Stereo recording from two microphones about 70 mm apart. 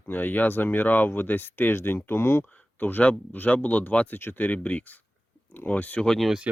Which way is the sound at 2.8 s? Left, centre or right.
Left.